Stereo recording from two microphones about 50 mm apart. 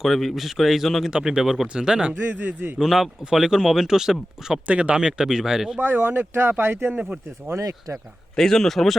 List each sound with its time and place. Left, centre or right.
0.0 s a man's voice: centre
1.1 s speech: centre
2.1 s a man's voice: right
2.7 s speech: centre
4.6 s speech: right; by 5.8 s centre
5.8 s speech: right
8.4 s speech: centre